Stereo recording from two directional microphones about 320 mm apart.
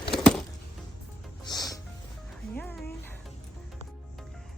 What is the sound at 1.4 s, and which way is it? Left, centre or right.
Music, centre.